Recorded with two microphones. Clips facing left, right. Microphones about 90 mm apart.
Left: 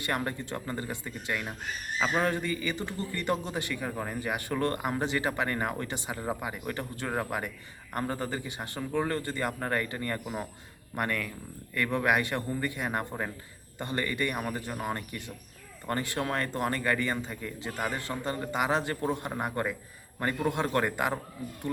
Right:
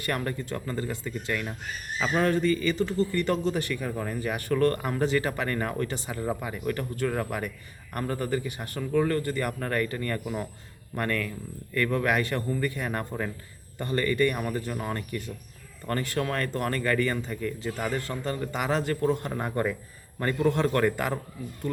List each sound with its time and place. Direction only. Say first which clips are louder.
0.0 s a man's voice: right 2 dB; 20° left (ahead or behind)